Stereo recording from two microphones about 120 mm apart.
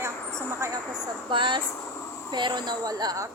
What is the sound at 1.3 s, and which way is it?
Speech, 45° right (ahead or behind).